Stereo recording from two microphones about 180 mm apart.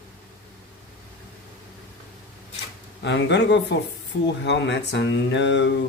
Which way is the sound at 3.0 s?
75° left (ahead or behind).